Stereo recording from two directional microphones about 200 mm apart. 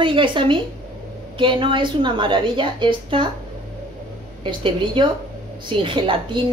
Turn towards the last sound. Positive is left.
turn(degrees=-25)  # may be behind; listen again after turning